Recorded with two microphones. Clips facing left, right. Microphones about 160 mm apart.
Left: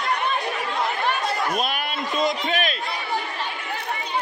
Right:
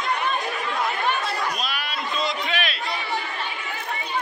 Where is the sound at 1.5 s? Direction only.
50° left (ahead or behind).